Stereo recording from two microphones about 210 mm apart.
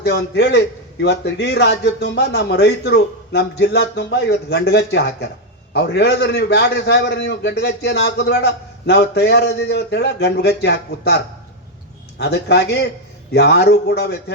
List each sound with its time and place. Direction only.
0.0 s a man's voice: 55° left (ahead or behind)
12.2 s a man's voice: 55° left (ahead or behind)